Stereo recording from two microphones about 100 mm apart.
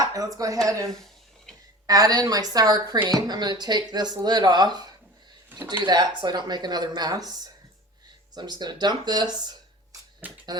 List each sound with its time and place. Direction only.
0.0 s a sound: 35° right (ahead or behind)
0.3 s a woman's voice: 35° right (ahead or behind)
1.9 s a woman's voice: 40° right (ahead or behind)
10.2 s speech: 15° right (ahead or behind)